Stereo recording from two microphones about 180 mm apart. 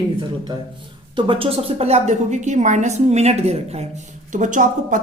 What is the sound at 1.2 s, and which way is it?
A woman's voice, 30° right (ahead or behind).